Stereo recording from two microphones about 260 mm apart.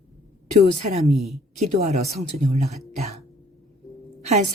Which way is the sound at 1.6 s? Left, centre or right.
Right.